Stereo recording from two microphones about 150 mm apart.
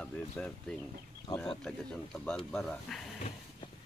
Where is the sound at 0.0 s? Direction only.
5° left (ahead or behind).